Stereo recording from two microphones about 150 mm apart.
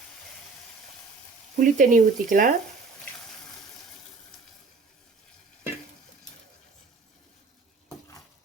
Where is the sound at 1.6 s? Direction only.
60° right (ahead or behind).